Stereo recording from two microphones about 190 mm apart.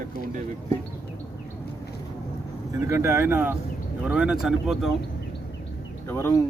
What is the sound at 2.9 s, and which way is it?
Speech, 15° right (ahead or behind).